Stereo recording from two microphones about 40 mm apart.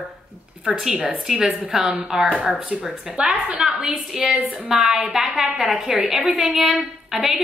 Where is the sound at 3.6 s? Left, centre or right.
Centre.